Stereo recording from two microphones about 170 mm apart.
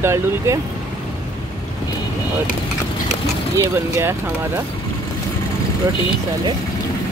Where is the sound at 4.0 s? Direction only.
15° right (ahead or behind).